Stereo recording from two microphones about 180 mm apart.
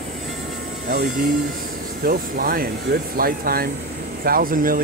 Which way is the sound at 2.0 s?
55° right (ahead or behind).